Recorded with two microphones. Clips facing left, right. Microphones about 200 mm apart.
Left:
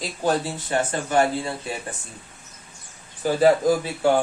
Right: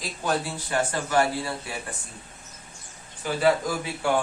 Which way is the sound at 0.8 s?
25° left (ahead or behind).